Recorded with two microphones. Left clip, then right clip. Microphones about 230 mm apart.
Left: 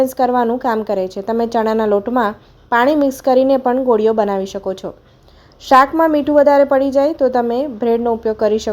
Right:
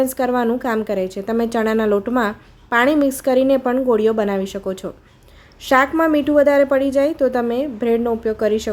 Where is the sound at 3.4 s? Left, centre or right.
Centre.